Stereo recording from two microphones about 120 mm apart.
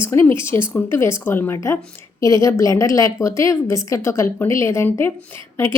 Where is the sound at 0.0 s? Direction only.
20° left (ahead or behind).